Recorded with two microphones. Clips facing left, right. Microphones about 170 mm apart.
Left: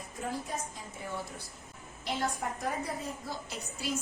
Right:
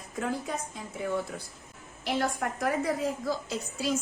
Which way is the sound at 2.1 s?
85° right.